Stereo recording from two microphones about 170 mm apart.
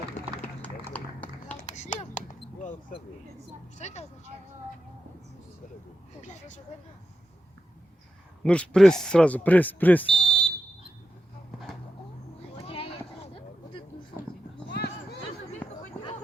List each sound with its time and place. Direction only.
0.6 s tap: 10° left (ahead or behind)
1.6 s a sound: 45° left (ahead or behind)
3.8 s speech: 40° left (ahead or behind)
8.4 s speech: 5° left (ahead or behind)
12.6 s a sound: 35° left (ahead or behind)
14.7 s clip-clop: 75° left (ahead or behind)